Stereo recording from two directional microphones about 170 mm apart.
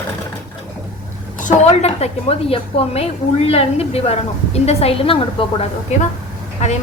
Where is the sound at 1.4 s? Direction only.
45° left (ahead or behind).